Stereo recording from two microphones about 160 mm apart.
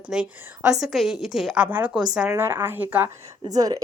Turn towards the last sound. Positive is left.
turn(degrees=-20)  # may be behind; listen again after turning